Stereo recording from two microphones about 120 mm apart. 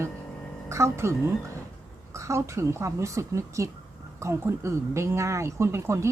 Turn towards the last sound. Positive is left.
turn(degrees=-25)  # may be behind; listen again after turning